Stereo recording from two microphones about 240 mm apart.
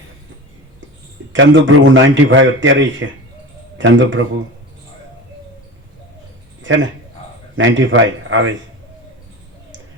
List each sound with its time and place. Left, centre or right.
1.3 s a man's voice: right
6.6 s a sound: right
7.5 s a man's voice: right